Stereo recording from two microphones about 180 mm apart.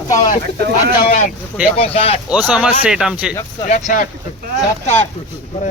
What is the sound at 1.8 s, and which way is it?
Speech, 35° left (ahead or behind).